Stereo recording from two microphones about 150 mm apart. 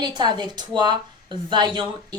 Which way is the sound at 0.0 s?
30° right (ahead or behind).